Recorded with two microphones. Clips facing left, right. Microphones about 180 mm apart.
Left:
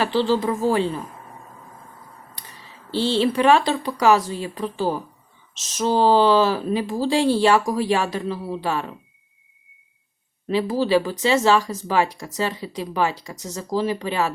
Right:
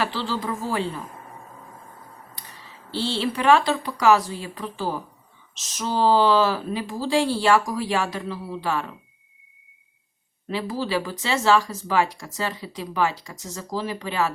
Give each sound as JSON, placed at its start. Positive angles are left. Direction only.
{"t": 0.0, "sound": "speech", "side_deg": 25}
{"t": 2.9, "sound": "speech", "side_deg": 20}
{"t": 10.5, "sound": "speech", "side_deg": 25}